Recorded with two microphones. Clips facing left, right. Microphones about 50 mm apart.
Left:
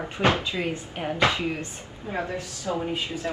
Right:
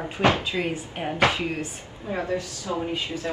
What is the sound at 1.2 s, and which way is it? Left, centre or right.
Speech, right.